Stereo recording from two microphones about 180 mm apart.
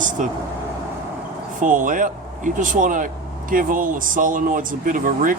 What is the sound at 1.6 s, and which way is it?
Speech, 45° right (ahead or behind).